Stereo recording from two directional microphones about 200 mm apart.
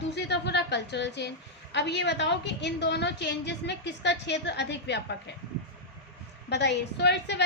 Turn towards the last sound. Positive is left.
turn(degrees=55)  # may be behind; listen again after turning